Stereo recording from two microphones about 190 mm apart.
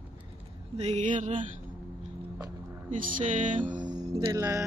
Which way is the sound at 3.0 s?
45° right (ahead or behind).